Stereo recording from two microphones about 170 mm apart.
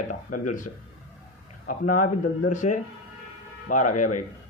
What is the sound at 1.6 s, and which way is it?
Speech, 50° left (ahead or behind).